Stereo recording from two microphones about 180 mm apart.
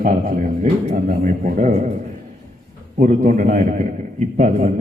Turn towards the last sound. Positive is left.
turn(degrees=-45)  # may be behind; listen again after turning